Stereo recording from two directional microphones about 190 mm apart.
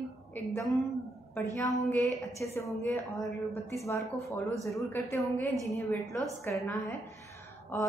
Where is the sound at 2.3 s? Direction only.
15° left (ahead or behind).